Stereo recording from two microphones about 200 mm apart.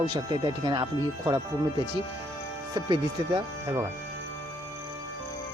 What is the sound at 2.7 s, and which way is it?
Speech, 20° right (ahead or behind).